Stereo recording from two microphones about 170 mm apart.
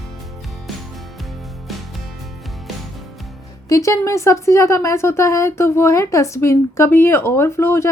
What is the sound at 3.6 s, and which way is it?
Speech, 20° left (ahead or behind).